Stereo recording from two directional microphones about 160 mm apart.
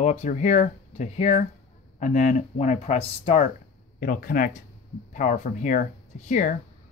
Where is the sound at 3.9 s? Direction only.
65° left (ahead or behind).